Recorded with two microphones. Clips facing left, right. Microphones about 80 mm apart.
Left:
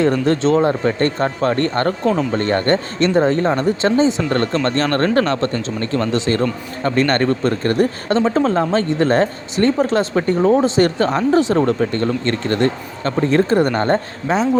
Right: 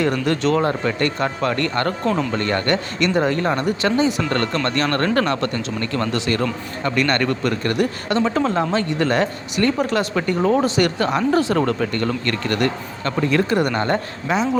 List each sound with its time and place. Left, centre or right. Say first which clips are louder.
0.3 s speech: left 4 dB; left